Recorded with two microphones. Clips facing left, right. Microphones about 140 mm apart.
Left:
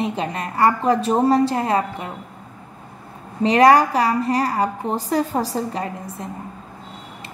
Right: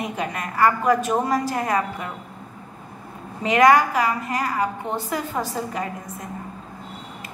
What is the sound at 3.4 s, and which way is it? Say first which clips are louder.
A woman's voice: left 3 dB; 35° left (ahead or behind).